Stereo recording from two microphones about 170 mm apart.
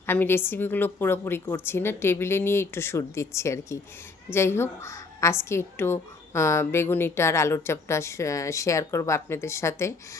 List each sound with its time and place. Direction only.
0.0 s a woman's voice: 10° left (ahead or behind)